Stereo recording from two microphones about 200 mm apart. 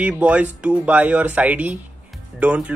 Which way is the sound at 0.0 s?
5° right (ahead or behind).